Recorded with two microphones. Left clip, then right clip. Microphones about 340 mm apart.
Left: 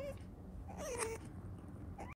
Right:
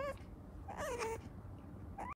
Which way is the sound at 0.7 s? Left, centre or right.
Centre.